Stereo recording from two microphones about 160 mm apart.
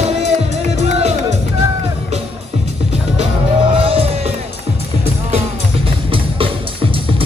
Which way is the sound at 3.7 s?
35° right (ahead or behind).